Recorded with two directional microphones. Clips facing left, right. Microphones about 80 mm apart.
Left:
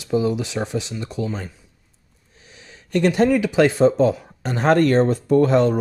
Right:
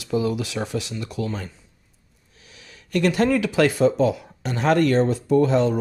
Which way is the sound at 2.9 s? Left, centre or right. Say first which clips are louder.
Left 3 dB; left.